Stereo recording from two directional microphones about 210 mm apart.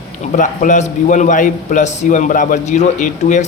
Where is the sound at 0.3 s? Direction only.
35° left (ahead or behind).